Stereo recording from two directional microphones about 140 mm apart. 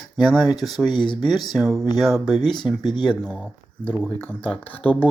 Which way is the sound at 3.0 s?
5° left (ahead or behind).